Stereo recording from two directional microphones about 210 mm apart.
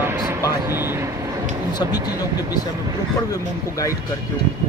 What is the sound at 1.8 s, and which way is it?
Speech, 20° left (ahead or behind).